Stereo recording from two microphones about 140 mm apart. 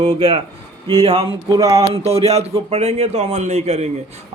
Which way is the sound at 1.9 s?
45° right (ahead or behind).